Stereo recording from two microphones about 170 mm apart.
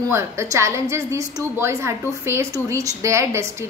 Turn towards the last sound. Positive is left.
turn(degrees=-15)  # may be behind; listen again after turning